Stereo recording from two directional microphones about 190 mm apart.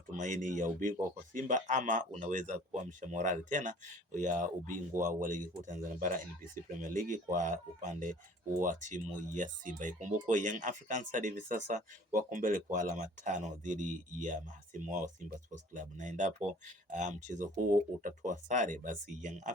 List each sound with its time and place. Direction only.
0.2 s speech: 40° right (ahead or behind)